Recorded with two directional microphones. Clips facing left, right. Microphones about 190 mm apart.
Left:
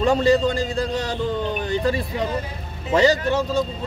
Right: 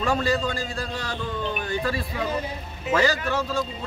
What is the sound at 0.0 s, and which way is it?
Speech, 20° left (ahead or behind).